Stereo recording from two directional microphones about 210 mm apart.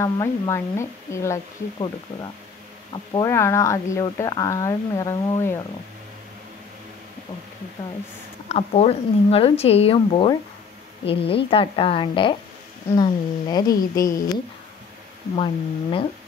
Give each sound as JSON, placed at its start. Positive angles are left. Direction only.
{"t": 0.0, "sound": "speech", "side_deg": 15}
{"t": 2.9, "sound": "speech", "side_deg": 20}
{"t": 8.5, "sound": "speech", "side_deg": 30}
{"t": 15.3, "sound": "speech", "side_deg": 25}